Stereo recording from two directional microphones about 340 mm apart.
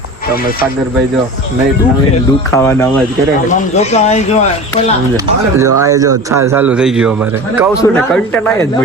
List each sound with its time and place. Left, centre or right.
2.5 s speech: centre
3.5 s speech: centre
5.1 s a man's voice: centre